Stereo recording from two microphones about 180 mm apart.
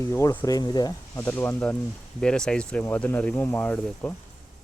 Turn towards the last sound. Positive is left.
turn(degrees=10)  # may be behind; listen again after turning